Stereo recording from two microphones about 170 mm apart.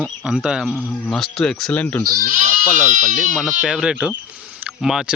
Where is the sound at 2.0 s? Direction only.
55° right (ahead or behind).